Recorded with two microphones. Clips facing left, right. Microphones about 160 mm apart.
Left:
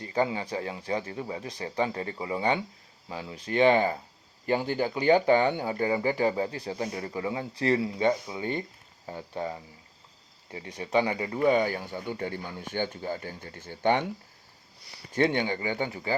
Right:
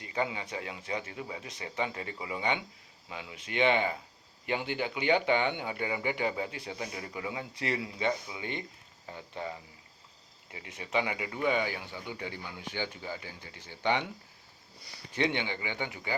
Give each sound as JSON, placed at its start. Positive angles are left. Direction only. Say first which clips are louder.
{"t": 0.0, "sound": "speech", "louder": "left 6 dB", "side_deg": 35}
{"t": 15.1, "sound": "speech", "louder": "left 6 dB", "side_deg": 45}